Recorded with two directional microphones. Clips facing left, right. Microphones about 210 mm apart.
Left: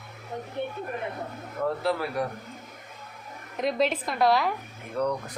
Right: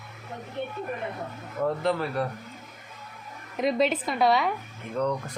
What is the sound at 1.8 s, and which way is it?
Speech, 10° left (ahead or behind).